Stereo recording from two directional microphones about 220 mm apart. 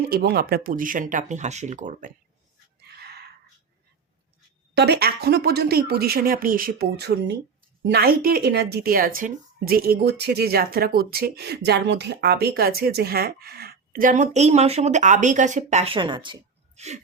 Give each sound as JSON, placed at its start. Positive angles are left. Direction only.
{"t": 0.1, "sound": "speech", "side_deg": -45}
{"t": 4.7, "sound": "speech", "side_deg": -50}